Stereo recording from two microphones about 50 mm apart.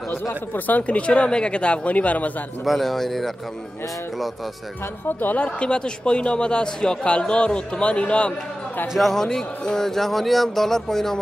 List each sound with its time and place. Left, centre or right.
0.1 s speech: left
2.6 s speech: centre
5.0 s speech: left
5.6 s speech: centre
9.1 s speech: centre